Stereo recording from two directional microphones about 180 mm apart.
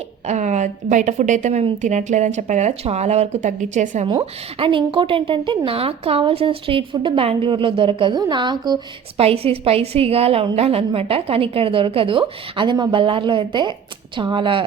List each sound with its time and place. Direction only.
0.3 s a woman's voice: 40° right (ahead or behind)
4.1 s a woman's voice: 30° right (ahead or behind)